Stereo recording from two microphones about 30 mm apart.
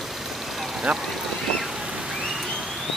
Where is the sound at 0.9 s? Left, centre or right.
Right.